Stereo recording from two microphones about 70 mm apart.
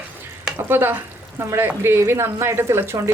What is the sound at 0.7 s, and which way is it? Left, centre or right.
Speech, right.